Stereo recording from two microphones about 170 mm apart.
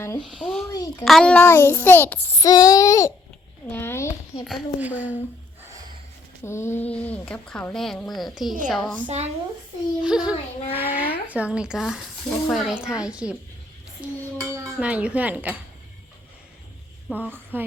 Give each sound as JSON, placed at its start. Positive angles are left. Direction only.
{"t": 0.2, "sound": "a woman's voice", "side_deg": 0}
{"t": 0.7, "sound": "child singing", "side_deg": 20}
{"t": 1.0, "sound": "a woman's voice", "side_deg": 5}
{"t": 2.4, "sound": "child singing", "side_deg": 20}
{"t": 3.7, "sound": "a sound", "side_deg": 15}
{"t": 4.4, "sound": "speech", "side_deg": -5}
{"t": 6.4, "sound": "a woman's voice", "side_deg": 15}
{"t": 9.0, "sound": "speech", "side_deg": -40}
{"t": 10.0, "sound": "a woman's voice", "side_deg": -5}
{"t": 14.0, "sound": "dishes", "side_deg": -15}
{"t": 17.1, "sound": "speech", "side_deg": -10}